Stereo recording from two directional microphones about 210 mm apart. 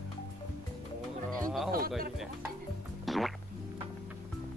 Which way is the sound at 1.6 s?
45° right (ahead or behind).